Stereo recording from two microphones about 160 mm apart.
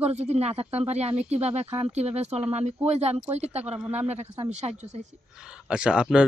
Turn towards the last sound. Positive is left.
turn(degrees=-5)  # may be behind; listen again after turning